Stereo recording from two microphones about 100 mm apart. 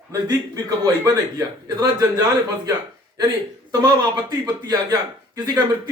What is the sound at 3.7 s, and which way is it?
A man's voice, 40° right (ahead or behind).